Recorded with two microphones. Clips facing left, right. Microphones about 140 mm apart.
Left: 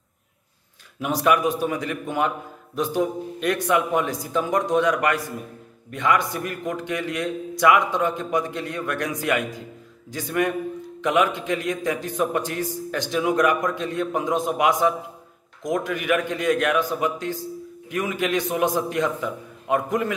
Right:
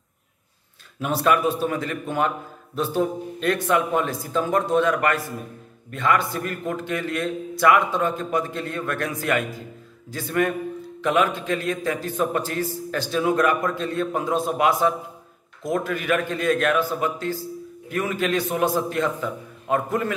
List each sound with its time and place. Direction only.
1.0 s a man's voice: 15° left (ahead or behind)